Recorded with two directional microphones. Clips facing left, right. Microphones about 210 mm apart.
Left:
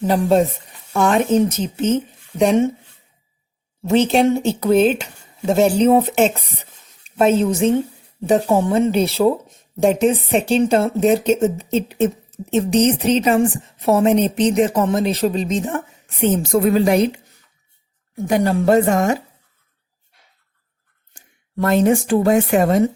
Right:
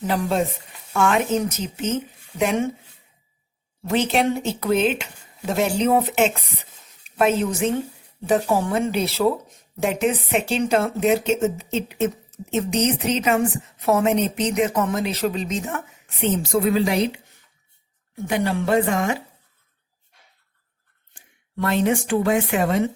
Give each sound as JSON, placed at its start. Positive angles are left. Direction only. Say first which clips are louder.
{"t": 0.0, "sound": "speech", "louder": "left 7 dB", "side_deg": 30}
{"t": 3.8, "sound": "a woman's voice", "louder": "left 6 dB", "side_deg": 30}
{"t": 16.2, "sound": "a woman's voice", "louder": "left 4 dB", "side_deg": 45}
{"t": 18.3, "sound": "a woman's voice", "louder": "left 6 dB", "side_deg": 40}
{"t": 21.1, "sound": "speech", "louder": "left 5 dB", "side_deg": 40}